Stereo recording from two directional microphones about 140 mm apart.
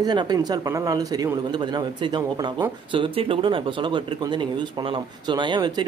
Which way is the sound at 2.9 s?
40° right (ahead or behind).